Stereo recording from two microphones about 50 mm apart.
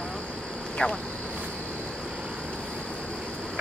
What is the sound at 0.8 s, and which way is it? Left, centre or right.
Speech, left.